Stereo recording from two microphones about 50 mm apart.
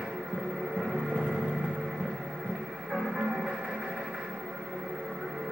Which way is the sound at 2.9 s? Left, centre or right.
Centre.